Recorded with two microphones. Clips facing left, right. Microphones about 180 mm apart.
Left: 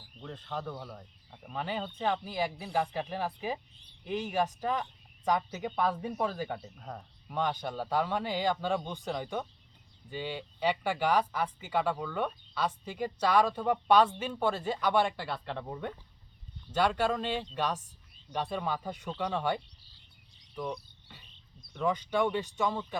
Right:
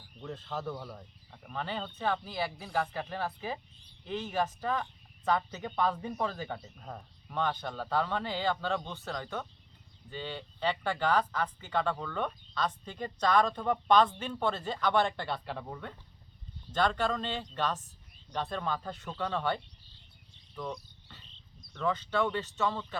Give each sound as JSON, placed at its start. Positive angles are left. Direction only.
{"t": 0.2, "sound": "speech", "side_deg": -5}
{"t": 1.5, "sound": "speech", "side_deg": 15}
{"t": 6.7, "sound": "speech", "side_deg": 0}
{"t": 7.3, "sound": "speech", "side_deg": 10}
{"t": 15.6, "sound": "speech", "side_deg": 15}
{"t": 20.6, "sound": "a sound", "side_deg": 10}
{"t": 21.7, "sound": "speech", "side_deg": 15}